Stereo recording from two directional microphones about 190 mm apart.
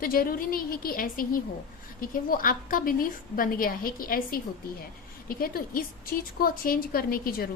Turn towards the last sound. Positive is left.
turn(degrees=50)  # may be behind; listen again after turning